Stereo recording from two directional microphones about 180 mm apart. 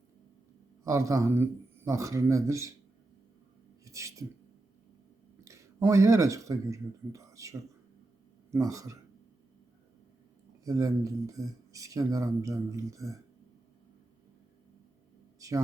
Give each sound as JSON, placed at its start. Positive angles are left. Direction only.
{"t": 0.9, "sound": "speech", "side_deg": -15}
{"t": 3.8, "sound": "speech", "side_deg": -20}
{"t": 5.5, "sound": "speech", "side_deg": -15}
{"t": 10.6, "sound": "speech", "side_deg": -20}
{"t": 15.4, "sound": "a sound", "side_deg": -20}